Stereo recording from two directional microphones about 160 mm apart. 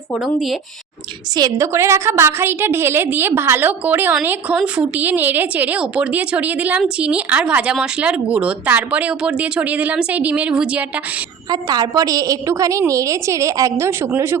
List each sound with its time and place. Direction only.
0.3 s speech: centre (ahead or behind)
1.4 s a woman's voice: 20° right (ahead or behind); by 10.8 s 5° right (ahead or behind)
11.4 s a woman's voice: 25° right (ahead or behind)